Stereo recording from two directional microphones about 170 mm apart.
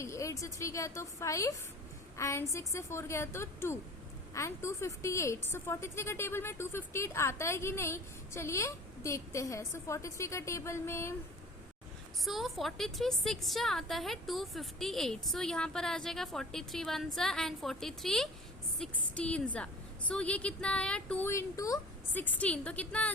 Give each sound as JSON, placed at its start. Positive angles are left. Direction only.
{"t": 0.0, "sound": "a woman's voice", "side_deg": 15}
{"t": 12.2, "sound": "a woman's voice", "side_deg": 0}